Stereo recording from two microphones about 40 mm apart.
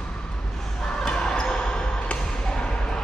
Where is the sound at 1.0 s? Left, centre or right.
Centre.